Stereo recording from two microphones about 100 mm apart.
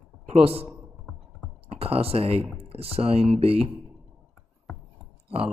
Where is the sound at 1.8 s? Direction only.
80° right.